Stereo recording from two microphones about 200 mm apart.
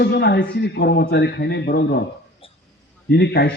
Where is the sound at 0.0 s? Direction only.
55° left (ahead or behind).